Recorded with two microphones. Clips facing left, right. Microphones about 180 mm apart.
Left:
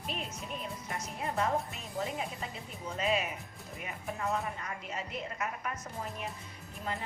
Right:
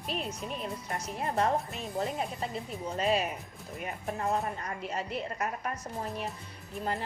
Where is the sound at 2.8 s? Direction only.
35° right (ahead or behind).